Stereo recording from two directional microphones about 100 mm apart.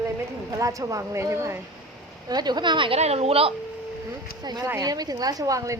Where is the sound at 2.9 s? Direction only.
90° right.